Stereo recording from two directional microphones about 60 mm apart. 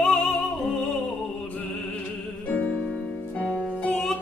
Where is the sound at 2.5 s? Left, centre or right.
Left.